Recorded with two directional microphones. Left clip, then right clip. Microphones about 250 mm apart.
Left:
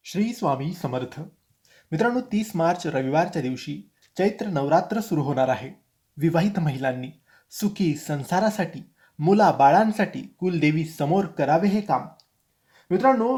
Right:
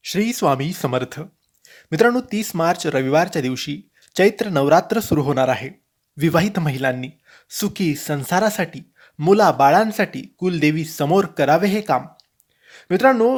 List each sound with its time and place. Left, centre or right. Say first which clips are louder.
0.0 s speech: right 7 dB; right